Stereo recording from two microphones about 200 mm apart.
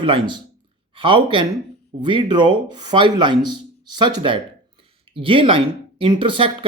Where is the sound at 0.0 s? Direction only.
25° right (ahead or behind).